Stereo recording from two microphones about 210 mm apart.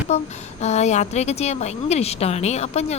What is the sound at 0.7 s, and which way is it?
A woman's voice, 30° left (ahead or behind).